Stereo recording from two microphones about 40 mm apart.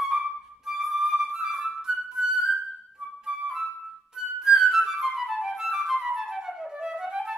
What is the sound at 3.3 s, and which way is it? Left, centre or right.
Flute, centre.